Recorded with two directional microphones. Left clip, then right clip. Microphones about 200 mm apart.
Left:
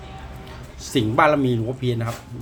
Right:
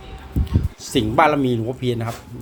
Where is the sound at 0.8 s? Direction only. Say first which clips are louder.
Right 1 dB; 20° right (ahead or behind).